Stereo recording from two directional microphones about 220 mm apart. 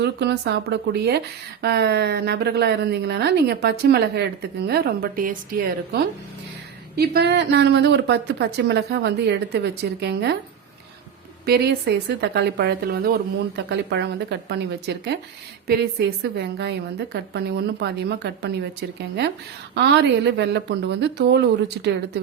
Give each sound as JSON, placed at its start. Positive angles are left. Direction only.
{"t": 0.0, "sound": "a woman's voice", "side_deg": -50}
{"t": 11.4, "sound": "a woman's voice", "side_deg": -45}